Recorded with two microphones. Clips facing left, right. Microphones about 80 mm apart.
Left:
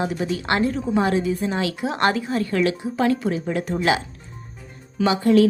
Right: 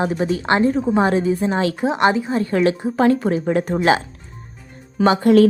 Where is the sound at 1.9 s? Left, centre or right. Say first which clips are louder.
Right 2 dB; centre; by 3.7 s right.